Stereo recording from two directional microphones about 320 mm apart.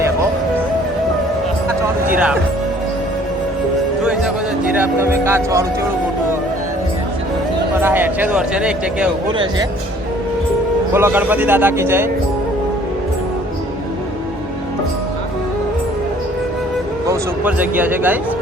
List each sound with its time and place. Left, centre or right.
1.6 s music: centre
4.0 s a man's voice: centre
7.8 s a man's voice: centre
10.9 s a man's voice: centre
17.1 s speech: centre